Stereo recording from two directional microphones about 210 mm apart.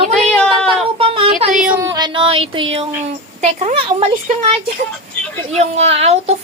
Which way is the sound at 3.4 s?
30° right (ahead or behind).